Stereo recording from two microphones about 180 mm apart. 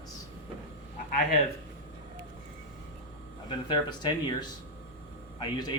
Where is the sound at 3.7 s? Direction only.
25° left (ahead or behind).